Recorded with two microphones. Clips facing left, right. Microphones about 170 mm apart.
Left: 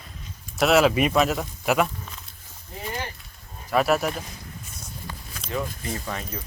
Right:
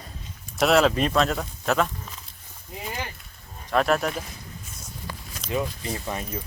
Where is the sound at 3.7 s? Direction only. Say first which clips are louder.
Left 1 dB; 5° left (ahead or behind).